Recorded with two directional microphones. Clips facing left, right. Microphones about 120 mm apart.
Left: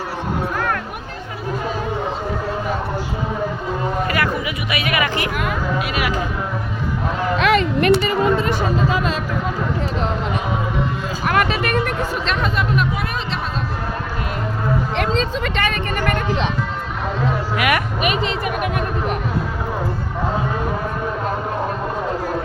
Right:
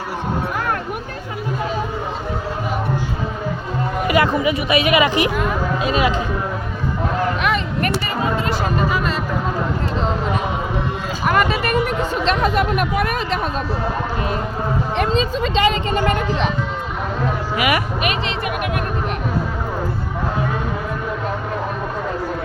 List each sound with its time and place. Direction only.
4.0 s speech: 20° right (ahead or behind)
7.3 s a sound: 90° left
11.3 s music: 5° right (ahead or behind)
12.2 s speech: 35° right (ahead or behind)
12.5 s speech: 55° right (ahead or behind)
15.1 s speech: 15° right (ahead or behind)
17.2 s a sound: 5° right (ahead or behind)